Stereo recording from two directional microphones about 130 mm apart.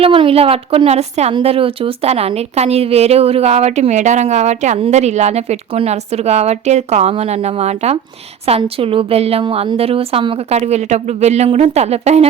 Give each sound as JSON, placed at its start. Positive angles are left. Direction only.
{"t": 0.0, "sound": "a woman's voice", "side_deg": -45}